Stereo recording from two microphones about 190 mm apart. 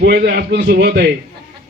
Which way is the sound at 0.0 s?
60° right (ahead or behind).